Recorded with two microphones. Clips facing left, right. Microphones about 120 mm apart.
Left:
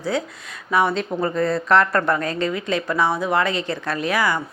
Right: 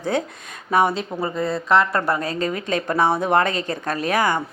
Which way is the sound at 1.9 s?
30° right (ahead or behind).